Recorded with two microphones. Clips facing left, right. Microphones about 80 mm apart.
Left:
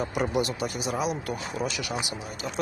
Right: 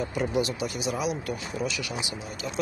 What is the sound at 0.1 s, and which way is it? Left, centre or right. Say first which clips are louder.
Speech: even; left.